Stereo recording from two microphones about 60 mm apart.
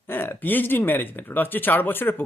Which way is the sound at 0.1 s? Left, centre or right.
Left.